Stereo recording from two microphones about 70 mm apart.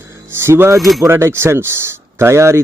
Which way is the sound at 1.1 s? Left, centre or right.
Right.